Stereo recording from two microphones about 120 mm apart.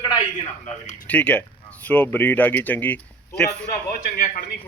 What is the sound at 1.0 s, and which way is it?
Speech, 10° left (ahead or behind).